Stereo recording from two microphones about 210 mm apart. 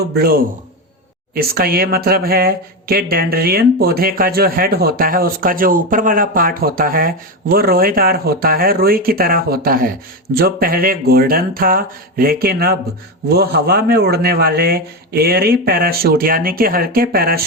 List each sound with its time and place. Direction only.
0.0 s speech: 45° right (ahead or behind)